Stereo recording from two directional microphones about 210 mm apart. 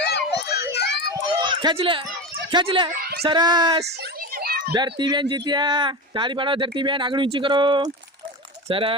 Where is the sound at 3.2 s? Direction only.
20° right (ahead or behind).